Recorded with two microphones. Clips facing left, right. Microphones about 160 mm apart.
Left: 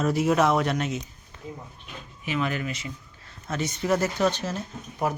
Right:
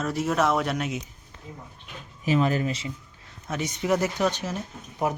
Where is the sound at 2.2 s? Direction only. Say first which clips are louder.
Right 5 dB; 35° right (ahead or behind).